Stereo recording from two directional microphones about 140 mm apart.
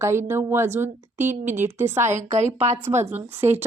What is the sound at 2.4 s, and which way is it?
Speech, 55° right (ahead or behind).